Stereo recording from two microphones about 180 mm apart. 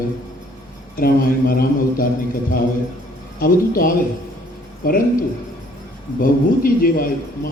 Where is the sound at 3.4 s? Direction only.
50° left (ahead or behind).